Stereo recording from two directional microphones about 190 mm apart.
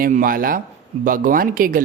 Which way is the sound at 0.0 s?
45° right (ahead or behind).